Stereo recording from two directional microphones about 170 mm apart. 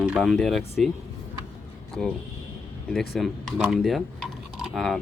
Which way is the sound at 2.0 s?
5° left (ahead or behind).